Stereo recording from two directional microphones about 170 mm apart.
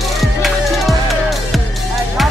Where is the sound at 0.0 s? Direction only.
Centre (ahead or behind).